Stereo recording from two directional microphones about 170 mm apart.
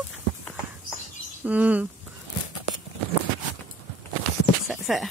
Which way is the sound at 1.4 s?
10° right (ahead or behind).